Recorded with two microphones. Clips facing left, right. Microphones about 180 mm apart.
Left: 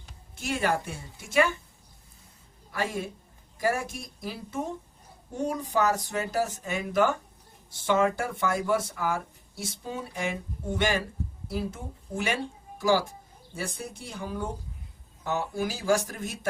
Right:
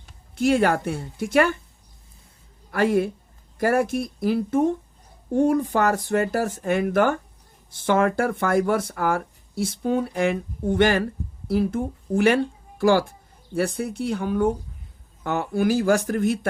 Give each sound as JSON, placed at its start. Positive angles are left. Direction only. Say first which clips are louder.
{"t": 0.3, "sound": "speech", "louder": "right 9 dB", "side_deg": -60}
{"t": 2.7, "sound": "speech", "louder": "right 11 dB", "side_deg": -55}